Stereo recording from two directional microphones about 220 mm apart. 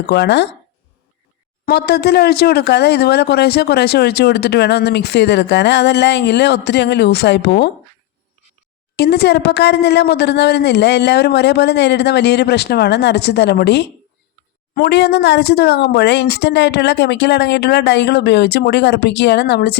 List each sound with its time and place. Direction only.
0.0 s speech: 50° left (ahead or behind)
1.6 s speech: 45° left (ahead or behind)
9.0 s speech: 45° left (ahead or behind)